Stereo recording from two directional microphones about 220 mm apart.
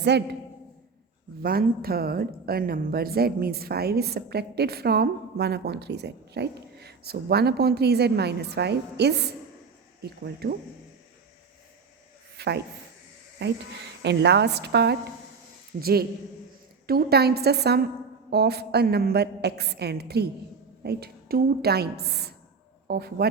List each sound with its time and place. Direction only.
0.0 s a woman's voice: 50° right (ahead or behind)
1.4 s a woman's voice: 45° right (ahead or behind)
12.4 s a woman's voice: 50° right (ahead or behind)